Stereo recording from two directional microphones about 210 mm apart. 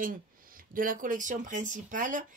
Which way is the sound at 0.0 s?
40° right (ahead or behind).